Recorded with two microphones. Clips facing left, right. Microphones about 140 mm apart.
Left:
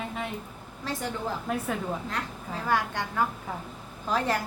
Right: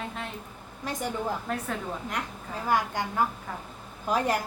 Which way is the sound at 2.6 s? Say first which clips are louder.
Right 1 dB; 10° right (ahead or behind).